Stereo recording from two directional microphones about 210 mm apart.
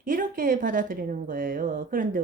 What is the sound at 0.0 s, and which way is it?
A woman's voice, 40° right (ahead or behind).